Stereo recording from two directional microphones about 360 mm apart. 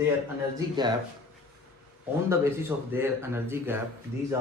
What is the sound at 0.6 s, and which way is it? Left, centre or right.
Speech, centre.